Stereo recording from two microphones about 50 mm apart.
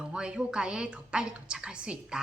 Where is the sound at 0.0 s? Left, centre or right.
Centre.